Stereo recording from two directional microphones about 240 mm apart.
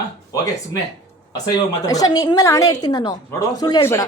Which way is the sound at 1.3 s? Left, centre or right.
Centre.